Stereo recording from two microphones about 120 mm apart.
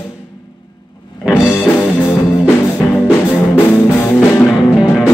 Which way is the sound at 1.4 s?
20° left (ahead or behind).